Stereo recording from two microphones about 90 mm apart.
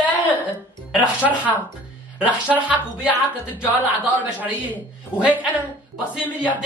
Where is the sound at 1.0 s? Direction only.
15° right (ahead or behind).